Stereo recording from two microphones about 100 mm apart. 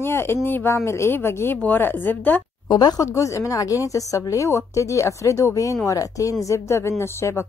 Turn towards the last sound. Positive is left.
turn(degrees=25)  # may be behind; listen again after turning